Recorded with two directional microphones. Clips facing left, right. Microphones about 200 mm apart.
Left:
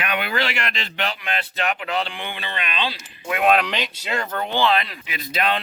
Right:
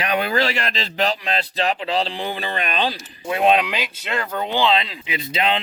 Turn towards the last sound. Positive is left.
turn(degrees=-25)  # may be behind; listen again after turning